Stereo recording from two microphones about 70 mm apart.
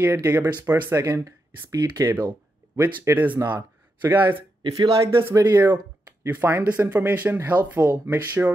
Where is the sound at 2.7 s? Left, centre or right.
Right.